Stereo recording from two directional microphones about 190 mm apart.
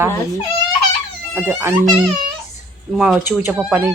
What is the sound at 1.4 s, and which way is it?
Speech, 15° right (ahead or behind).